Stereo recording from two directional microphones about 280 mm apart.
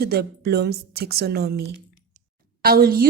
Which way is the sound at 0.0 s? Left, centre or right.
Right.